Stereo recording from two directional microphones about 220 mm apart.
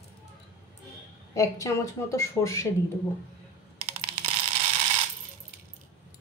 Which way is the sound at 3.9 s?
25° right (ahead or behind).